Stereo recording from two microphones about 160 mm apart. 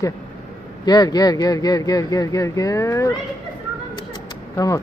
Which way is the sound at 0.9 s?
25° left (ahead or behind).